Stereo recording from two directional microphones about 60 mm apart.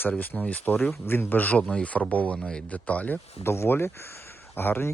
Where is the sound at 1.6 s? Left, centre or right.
Centre.